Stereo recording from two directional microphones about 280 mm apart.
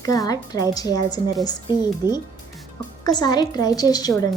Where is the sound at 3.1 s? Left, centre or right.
Centre.